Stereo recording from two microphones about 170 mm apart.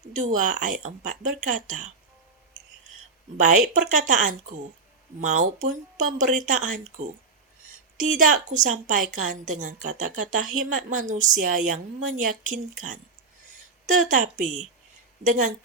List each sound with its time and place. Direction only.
0.2 s a woman's voice: 50° right (ahead or behind)
3.4 s a woman's voice: 45° right (ahead or behind)
8.1 s a woman's voice: 45° right (ahead or behind)